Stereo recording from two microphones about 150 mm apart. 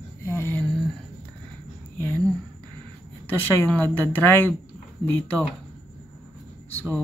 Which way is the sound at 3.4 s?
15° left (ahead or behind).